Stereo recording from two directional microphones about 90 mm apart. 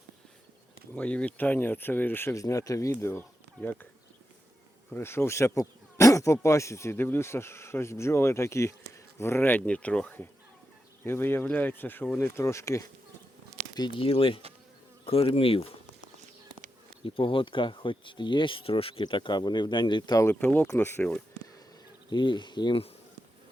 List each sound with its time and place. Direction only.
0.9 s speech: 15° left (ahead or behind)
2.3 s speech: 40° left (ahead or behind); by 3.8 s 20° left (ahead or behind)
4.9 s speech: 25° left (ahead or behind)
13.7 s speech: 55° left (ahead or behind)
14.0 s insect: 90° left
17.0 s speech: 75° left (ahead or behind); by 20.1 s 55° left (ahead or behind)
20.4 s speech: 20° left (ahead or behind)
22.1 s speech: 60° left (ahead or behind)